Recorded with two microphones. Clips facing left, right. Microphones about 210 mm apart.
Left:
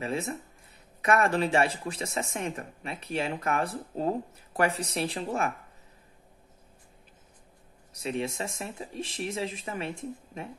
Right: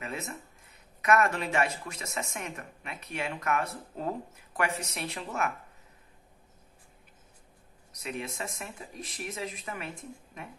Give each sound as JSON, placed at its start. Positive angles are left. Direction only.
{"t": 0.0, "sound": "speech", "side_deg": 30}
{"t": 7.9, "sound": "speech", "side_deg": 30}